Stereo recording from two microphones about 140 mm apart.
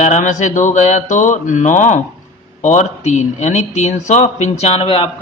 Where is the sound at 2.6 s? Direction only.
60° left (ahead or behind).